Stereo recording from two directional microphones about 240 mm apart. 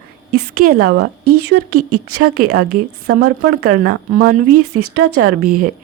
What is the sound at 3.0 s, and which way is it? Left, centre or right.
Speech, right.